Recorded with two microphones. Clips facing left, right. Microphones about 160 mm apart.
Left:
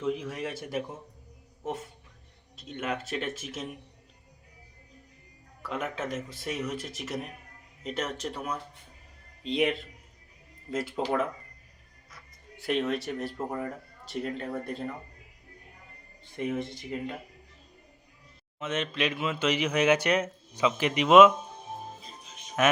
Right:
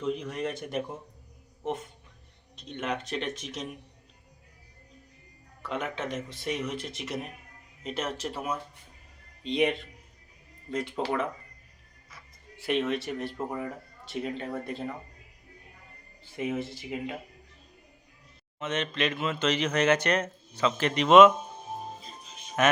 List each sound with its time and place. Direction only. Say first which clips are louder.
0.0 s speech: even; 5° left (ahead or behind)
5.6 s speech: even; 5° left (ahead or behind)
12.1 s music: even; centre (ahead or behind)
13.5 s speech: left 1 dB; centre (ahead or behind)
16.6 s speech: even; 5° right (ahead or behind)
18.6 s a man's voice: even; 5° left (ahead or behind)
22.6 s a man's voice: even; 5° left (ahead or behind)